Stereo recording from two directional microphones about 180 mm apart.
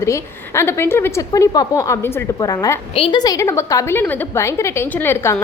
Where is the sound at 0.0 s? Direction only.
15° left (ahead or behind).